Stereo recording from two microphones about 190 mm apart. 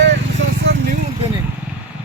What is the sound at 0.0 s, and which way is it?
Vehicle, 70° right (ahead or behind).